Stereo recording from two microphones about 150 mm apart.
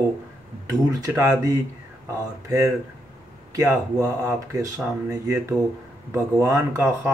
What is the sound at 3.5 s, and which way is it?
Speech, 20° right (ahead or behind).